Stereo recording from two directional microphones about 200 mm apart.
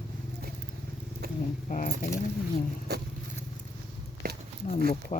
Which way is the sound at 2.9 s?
55° right (ahead or behind).